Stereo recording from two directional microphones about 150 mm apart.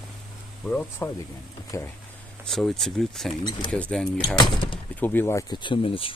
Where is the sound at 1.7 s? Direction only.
20° left (ahead or behind).